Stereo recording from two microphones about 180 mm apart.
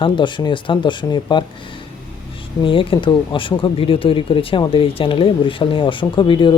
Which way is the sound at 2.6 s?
30° left (ahead or behind).